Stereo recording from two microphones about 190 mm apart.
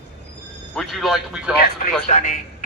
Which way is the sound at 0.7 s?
Centre (ahead or behind).